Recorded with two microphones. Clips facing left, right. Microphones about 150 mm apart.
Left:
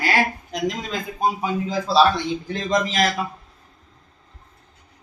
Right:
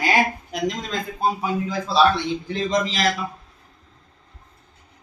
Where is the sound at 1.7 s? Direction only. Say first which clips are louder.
Left 5 dB; 35° left (ahead or behind).